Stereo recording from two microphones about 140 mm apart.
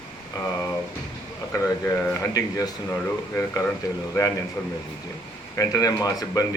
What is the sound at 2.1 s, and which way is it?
Speech, 25° left (ahead or behind).